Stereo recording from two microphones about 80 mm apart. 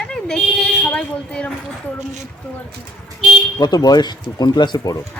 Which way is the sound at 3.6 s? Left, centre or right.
Left.